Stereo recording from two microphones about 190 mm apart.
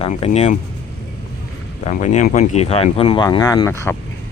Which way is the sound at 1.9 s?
40° left (ahead or behind).